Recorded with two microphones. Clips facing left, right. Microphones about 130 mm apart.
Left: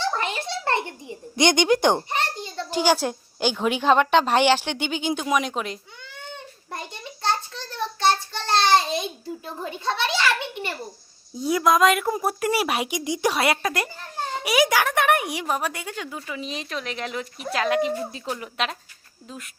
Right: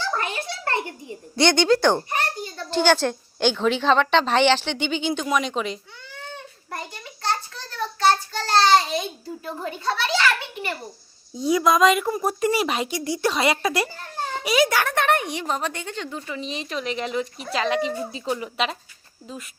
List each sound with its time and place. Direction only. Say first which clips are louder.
0.0 s a sound: left 1 dB; 25° left (ahead or behind)
1.4 s a child's voice: right 1 dB; 15° left (ahead or behind)
2.6 s a woman's voice: right 2 dB; 10° left (ahead or behind)
6.7 s child singing: even; 25° left (ahead or behind)
9.6 s a sound: even; 20° left (ahead or behind)
11.3 s a woman's voice: right 1 dB; centre (ahead or behind)
14.4 s a woman's voice: even; 10° left (ahead or behind)